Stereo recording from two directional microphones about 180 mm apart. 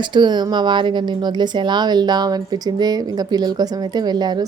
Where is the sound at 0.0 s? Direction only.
25° right (ahead or behind).